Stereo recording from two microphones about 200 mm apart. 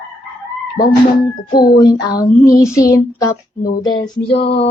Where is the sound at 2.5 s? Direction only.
15° left (ahead or behind).